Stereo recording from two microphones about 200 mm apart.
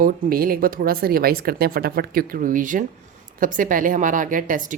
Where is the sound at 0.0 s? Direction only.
45° right (ahead or behind).